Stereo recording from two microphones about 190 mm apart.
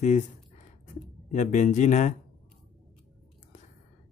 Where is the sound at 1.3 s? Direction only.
40° left (ahead or behind).